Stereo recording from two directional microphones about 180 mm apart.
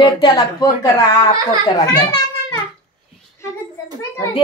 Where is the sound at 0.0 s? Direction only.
25° left (ahead or behind).